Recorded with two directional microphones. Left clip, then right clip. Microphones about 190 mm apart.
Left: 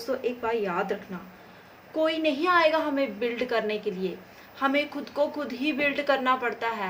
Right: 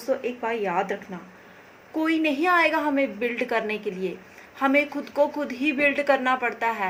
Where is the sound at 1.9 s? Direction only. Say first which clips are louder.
Right 1 dB; 25° right (ahead or behind).